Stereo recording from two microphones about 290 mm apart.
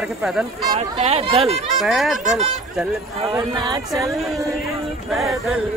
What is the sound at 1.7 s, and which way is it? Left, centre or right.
Speech, centre.